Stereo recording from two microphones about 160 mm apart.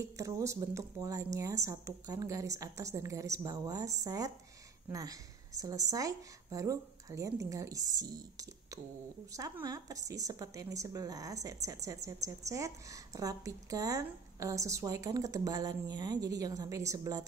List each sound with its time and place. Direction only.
0.0 s speech: 20° right (ahead or behind)